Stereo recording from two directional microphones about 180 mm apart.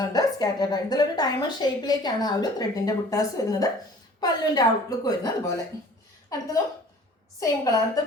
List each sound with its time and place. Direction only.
0.0 s a woman's voice: 20° left (ahead or behind)
7.3 s a woman's voice: 20° left (ahead or behind)